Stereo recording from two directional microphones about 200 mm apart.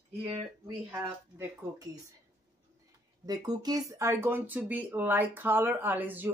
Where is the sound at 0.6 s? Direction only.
15° right (ahead or behind).